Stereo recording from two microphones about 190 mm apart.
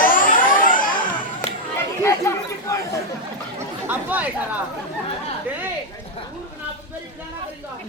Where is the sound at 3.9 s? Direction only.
10° right (ahead or behind).